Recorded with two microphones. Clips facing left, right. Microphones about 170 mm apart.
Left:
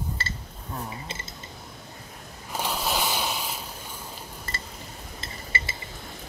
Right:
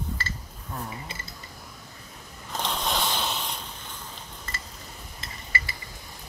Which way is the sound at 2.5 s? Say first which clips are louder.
Left 1 dB; 10° left (ahead or behind).